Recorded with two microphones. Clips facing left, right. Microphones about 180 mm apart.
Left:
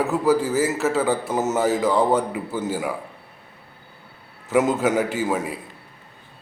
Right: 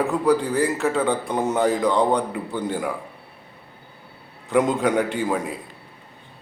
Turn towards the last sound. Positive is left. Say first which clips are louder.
# even
turn(degrees=5)  # may be behind; listen again after turning